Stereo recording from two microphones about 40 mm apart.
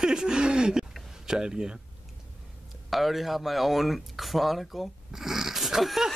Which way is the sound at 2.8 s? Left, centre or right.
Centre.